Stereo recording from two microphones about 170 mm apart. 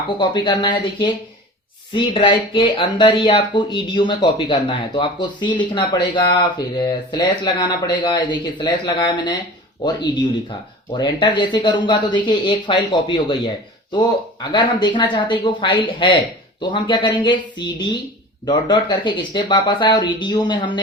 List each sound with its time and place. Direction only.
0.2 s speech: 25° left (ahead or behind)
1.9 s speech: 30° left (ahead or behind)
10.9 s speech: 25° left (ahead or behind)
14.5 s speech: 25° left (ahead or behind)